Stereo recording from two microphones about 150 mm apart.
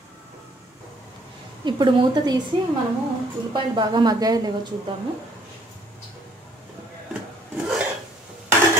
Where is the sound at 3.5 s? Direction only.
30° right (ahead or behind).